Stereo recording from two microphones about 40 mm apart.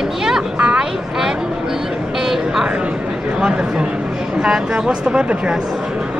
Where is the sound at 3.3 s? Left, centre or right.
Centre.